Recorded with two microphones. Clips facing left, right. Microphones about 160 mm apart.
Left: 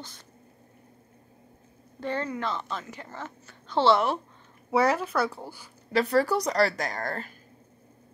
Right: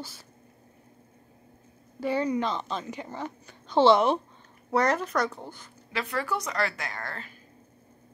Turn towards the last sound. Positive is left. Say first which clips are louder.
# left 5 dB
turn(degrees=45)  # may be behind; listen again after turning